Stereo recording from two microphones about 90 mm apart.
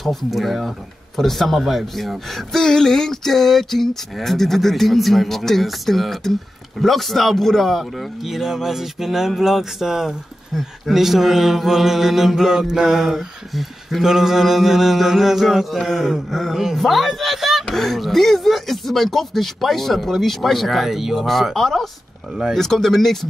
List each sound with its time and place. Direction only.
0.0 s speech: centre (ahead or behind)
22.6 s speech: 5° left (ahead or behind)